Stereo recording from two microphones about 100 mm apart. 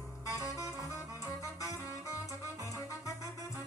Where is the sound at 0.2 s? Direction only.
30° left (ahead or behind).